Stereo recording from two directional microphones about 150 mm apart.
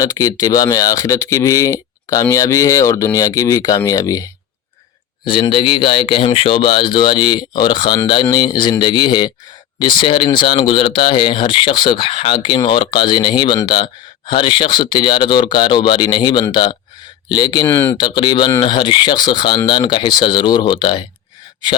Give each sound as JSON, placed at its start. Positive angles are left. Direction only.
{"t": 0.0, "sound": "speech", "side_deg": 25}
{"t": 5.2, "sound": "speech", "side_deg": 35}
{"t": 17.7, "sound": "speech", "side_deg": 15}
{"t": 17.9, "sound": "speech", "side_deg": 30}